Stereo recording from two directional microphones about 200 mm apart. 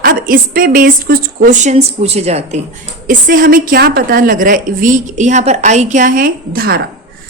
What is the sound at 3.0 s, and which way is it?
A woman's voice, 45° right (ahead or behind).